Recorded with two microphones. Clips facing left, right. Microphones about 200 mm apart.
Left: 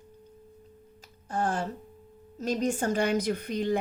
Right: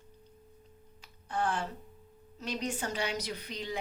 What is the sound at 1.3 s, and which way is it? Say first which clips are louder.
A woman's voice: left 3 dB; 45° left (ahead or behind).